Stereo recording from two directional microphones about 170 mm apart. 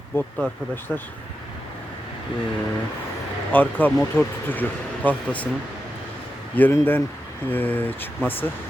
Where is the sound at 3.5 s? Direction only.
10° left (ahead or behind).